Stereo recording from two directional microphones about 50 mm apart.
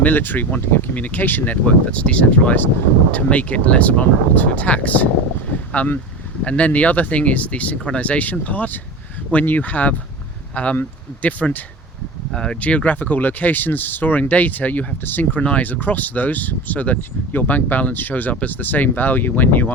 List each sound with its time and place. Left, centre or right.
0.0 s speech: left
1.6 s speech: left
12.3 s speech: centre
12.5 s speech: left
15.4 s speech: left